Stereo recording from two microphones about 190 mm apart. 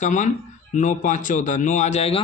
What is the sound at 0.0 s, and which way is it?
Speech, 40° left (ahead or behind).